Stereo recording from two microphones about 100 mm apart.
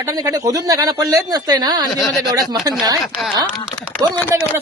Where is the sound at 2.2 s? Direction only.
40° right (ahead or behind).